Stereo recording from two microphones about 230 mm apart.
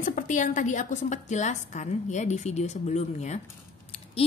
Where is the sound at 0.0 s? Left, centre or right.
Left.